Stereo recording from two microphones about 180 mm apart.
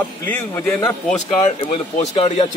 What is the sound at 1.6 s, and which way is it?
Speech, 30° left (ahead or behind).